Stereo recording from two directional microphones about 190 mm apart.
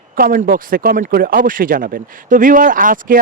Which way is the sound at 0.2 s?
45° right (ahead or behind).